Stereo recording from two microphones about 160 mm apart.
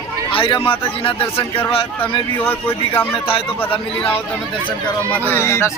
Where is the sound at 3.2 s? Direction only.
35° left (ahead or behind).